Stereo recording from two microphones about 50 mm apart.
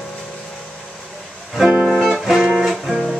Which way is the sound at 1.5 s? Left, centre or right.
Centre.